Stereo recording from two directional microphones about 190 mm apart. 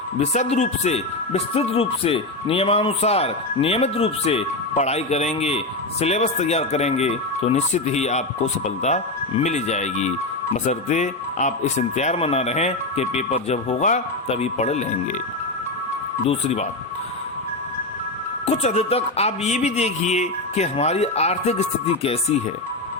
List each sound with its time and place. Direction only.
0.2 s speech: 35° left (ahead or behind)
16.2 s speech: 30° left (ahead or behind)
18.4 s speech: 35° left (ahead or behind)